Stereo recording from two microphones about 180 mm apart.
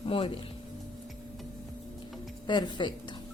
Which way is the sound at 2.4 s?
25° left (ahead or behind).